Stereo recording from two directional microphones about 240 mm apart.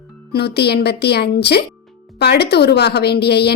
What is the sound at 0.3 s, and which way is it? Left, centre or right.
Speech, left.